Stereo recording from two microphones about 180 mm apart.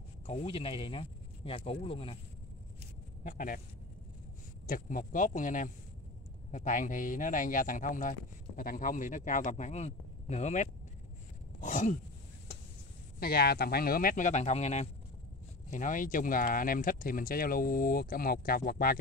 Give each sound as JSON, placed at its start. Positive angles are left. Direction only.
{"t": 0.3, "sound": "speech", "side_deg": 30}
{"t": 3.3, "sound": "speech", "side_deg": 50}
{"t": 4.6, "sound": "speech", "side_deg": 50}
{"t": 11.6, "sound": "a sound", "side_deg": 40}
{"t": 13.2, "sound": "speech", "side_deg": 60}